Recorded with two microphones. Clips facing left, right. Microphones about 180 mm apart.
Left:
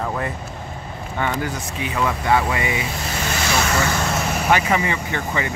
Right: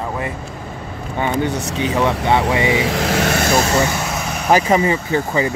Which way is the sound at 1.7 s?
30° right (ahead or behind).